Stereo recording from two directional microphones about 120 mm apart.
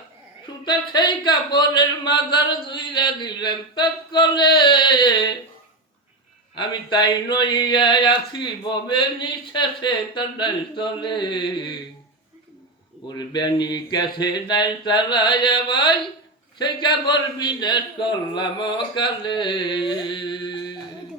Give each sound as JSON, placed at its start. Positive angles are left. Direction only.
{"t": 0.6, "sound": "speech", "side_deg": 40}
{"t": 6.6, "sound": "speech", "side_deg": 35}
{"t": 13.1, "sound": "speech", "side_deg": 35}
{"t": 19.9, "sound": "music", "side_deg": 40}